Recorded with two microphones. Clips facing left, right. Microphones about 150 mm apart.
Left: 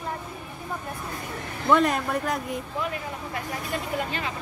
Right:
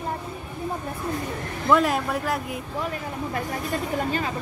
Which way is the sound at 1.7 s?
Centre (ahead or behind).